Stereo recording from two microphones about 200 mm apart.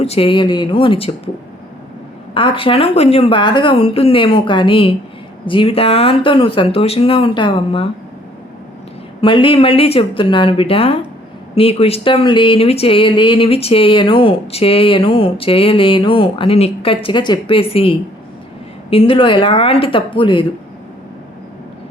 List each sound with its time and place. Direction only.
0.0 s speech: 30° left (ahead or behind)
2.3 s speech: 25° left (ahead or behind)
9.2 s speech: 25° left (ahead or behind)